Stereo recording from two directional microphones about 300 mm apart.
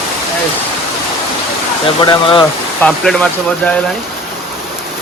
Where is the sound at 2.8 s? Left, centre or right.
Centre.